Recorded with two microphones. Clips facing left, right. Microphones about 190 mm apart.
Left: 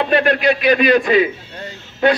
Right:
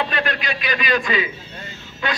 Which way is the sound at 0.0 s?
55° left (ahead or behind).